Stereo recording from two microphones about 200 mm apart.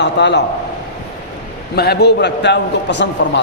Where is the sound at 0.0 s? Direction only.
60° left (ahead or behind).